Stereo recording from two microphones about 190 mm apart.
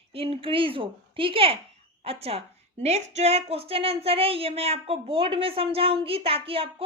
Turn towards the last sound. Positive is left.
turn(degrees=-30)  # may be behind; listen again after turning